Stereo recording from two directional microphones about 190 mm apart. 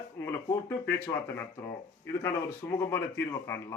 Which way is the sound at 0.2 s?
15° left (ahead or behind).